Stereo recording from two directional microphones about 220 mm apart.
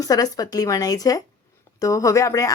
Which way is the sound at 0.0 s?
15° left (ahead or behind).